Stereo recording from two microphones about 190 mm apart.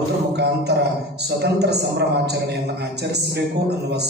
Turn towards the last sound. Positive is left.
turn(degrees=-60)  # may be behind; listen again after turning